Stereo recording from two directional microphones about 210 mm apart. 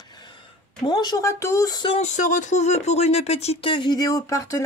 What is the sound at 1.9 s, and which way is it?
Speech, 35° left (ahead or behind).